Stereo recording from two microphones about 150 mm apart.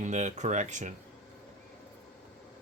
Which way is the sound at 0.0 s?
50° right (ahead or behind).